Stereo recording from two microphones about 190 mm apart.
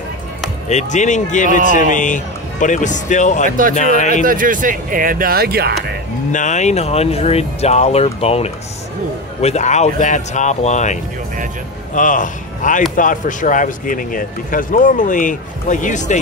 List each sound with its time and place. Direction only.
0.7 s speech: 40° left (ahead or behind)
4.1 s speech: 45° right (ahead or behind)
6.3 s speech: 40° left (ahead or behind)